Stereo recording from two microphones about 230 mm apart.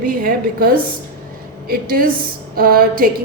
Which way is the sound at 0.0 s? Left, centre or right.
Right.